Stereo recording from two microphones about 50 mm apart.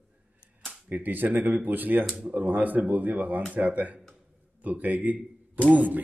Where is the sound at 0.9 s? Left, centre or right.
Right.